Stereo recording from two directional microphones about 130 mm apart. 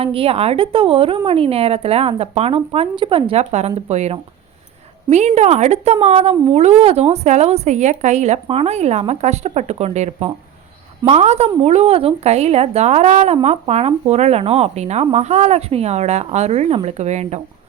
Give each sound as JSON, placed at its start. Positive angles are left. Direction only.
{"t": 0.0, "sound": "a woman's voice", "side_deg": -45}